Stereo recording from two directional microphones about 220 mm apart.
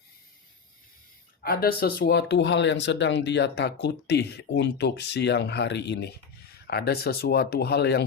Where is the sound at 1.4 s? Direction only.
45° left (ahead or behind).